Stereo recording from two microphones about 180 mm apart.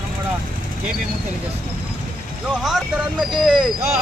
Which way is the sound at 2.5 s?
Centre (ahead or behind).